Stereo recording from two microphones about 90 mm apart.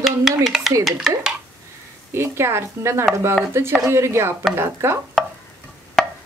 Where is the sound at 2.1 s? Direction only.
30° right (ahead or behind).